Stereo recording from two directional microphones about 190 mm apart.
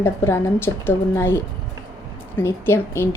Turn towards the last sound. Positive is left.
turn(degrees=15)  # may be behind; listen again after turning